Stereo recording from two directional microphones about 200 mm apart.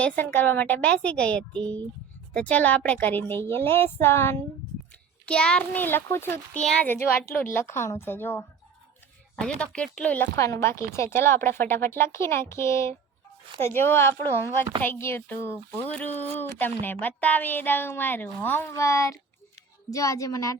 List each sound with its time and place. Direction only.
0.0 s a child's voice: 10° left (ahead or behind)